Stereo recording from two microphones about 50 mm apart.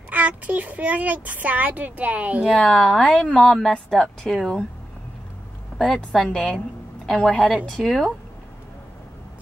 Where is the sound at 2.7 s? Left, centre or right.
Centre.